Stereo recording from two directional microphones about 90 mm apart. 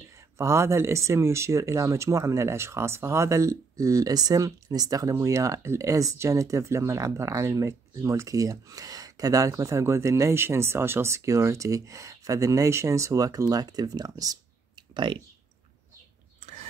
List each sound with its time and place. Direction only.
0.4 s speech: 30° right (ahead or behind)